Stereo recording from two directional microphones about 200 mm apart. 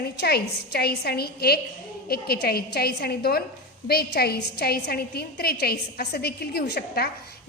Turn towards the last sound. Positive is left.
turn(degrees=55)  # may be behind; listen again after turning